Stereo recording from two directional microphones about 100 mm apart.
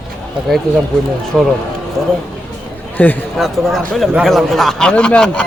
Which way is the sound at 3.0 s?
15° left (ahead or behind).